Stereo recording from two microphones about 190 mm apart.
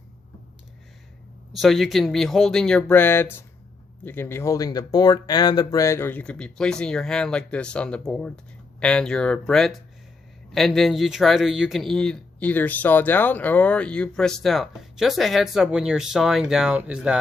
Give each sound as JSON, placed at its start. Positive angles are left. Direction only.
{"t": 1.5, "sound": "speech", "side_deg": 0}